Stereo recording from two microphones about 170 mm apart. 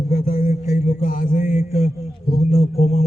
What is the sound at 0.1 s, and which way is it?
Speech, 55° left (ahead or behind).